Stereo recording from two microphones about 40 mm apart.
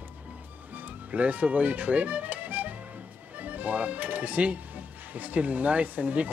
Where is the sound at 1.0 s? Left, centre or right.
Right.